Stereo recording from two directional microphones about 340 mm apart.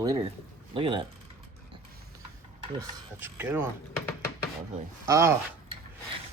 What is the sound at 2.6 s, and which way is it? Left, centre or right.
Speech, centre.